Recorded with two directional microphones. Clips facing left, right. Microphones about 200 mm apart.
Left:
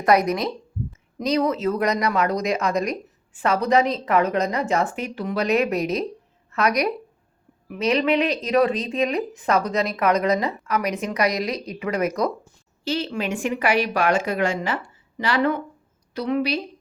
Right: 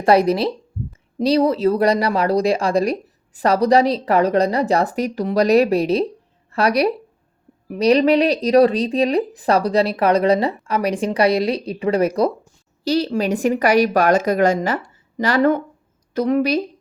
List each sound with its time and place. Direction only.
0.0 s speech: 30° right (ahead or behind)